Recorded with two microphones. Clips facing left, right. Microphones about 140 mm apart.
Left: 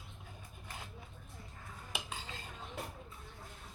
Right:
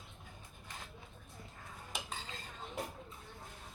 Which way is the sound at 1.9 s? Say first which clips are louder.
Left 1 dB; 5° left (ahead or behind).